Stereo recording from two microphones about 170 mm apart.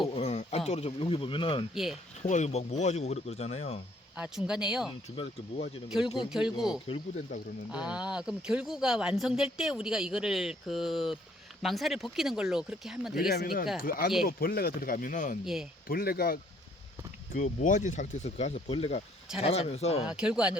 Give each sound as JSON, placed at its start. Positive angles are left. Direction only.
{"t": 0.1, "sound": "speech", "side_deg": 40}
{"t": 1.7, "sound": "speech", "side_deg": 0}
{"t": 2.2, "sound": "speech", "side_deg": 45}
{"t": 4.2, "sound": "speech", "side_deg": -5}
{"t": 4.9, "sound": "speech", "side_deg": 35}
{"t": 5.9, "sound": "speech", "side_deg": 0}
{"t": 13.1, "sound": "speech", "side_deg": 65}
{"t": 15.9, "sound": "speech", "side_deg": 60}
{"t": 17.3, "sound": "speech", "side_deg": 45}
{"t": 20.1, "sound": "speech", "side_deg": -5}